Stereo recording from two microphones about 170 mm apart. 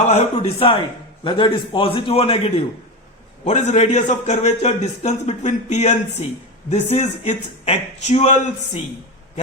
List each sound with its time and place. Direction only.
0.1 s a man's voice: 35° left (ahead or behind)